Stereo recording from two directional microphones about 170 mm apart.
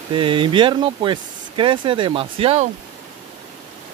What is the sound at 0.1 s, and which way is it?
Speech, 30° right (ahead or behind).